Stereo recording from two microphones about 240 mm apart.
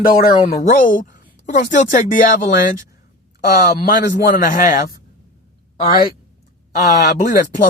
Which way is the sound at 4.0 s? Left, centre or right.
Left.